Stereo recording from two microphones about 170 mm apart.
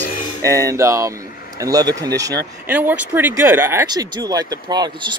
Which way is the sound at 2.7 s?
10° right (ahead or behind).